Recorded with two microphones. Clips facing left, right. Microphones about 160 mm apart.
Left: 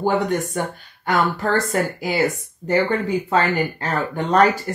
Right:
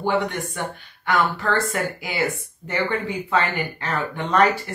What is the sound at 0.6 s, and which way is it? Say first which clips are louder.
Speech: left 4 dB; 40° left (ahead or behind).